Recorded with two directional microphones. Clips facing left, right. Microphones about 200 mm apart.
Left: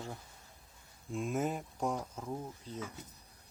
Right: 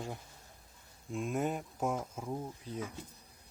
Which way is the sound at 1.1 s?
Centre (ahead or behind).